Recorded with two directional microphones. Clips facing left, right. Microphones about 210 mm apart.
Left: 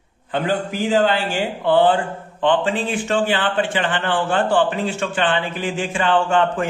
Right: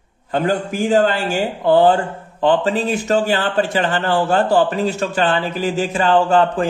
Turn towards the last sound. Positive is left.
turn(degrees=-35)  # may be behind; listen again after turning